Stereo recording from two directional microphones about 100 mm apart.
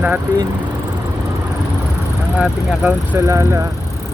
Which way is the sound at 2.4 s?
15° right (ahead or behind).